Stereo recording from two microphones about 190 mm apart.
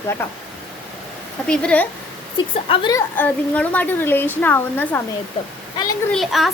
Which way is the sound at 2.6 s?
25° left (ahead or behind).